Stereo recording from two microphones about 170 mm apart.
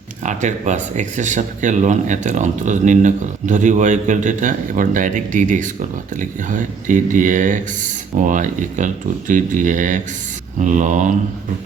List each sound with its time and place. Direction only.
0.3 s speech: 45° right (ahead or behind)